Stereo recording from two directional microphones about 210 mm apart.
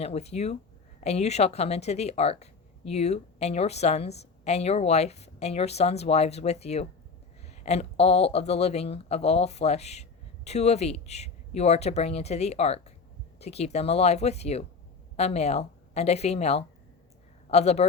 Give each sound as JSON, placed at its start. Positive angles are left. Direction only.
{"t": 0.0, "sound": "speech", "side_deg": 30}